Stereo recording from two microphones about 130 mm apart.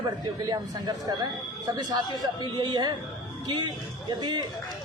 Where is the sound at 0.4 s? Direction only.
30° right (ahead or behind).